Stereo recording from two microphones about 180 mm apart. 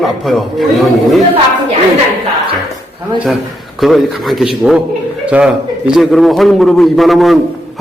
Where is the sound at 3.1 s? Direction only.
Centre (ahead or behind).